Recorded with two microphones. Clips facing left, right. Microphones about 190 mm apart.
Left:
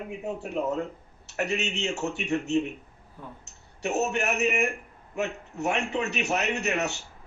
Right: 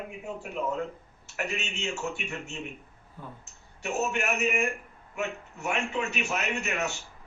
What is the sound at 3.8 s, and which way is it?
A man's voice, 40° left (ahead or behind).